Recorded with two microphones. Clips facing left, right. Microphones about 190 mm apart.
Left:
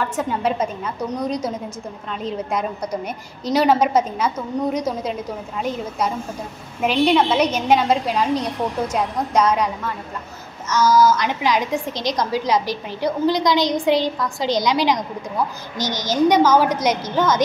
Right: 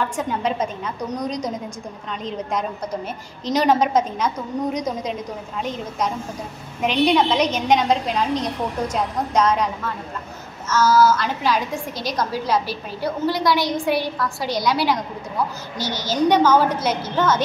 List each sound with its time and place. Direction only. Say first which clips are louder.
0.1 s a woman's voice: left 2 dB; 5° left (ahead or behind)
10.7 s a woman's voice: left 1 dB; 15° left (ahead or behind)